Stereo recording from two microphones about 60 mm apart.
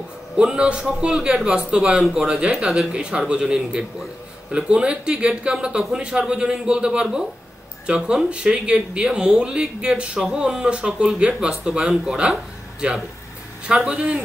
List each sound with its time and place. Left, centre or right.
0.4 s speech: centre
13.8 s speech: centre